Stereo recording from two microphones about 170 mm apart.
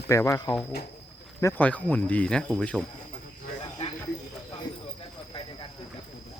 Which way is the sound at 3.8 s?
40° left (ahead or behind).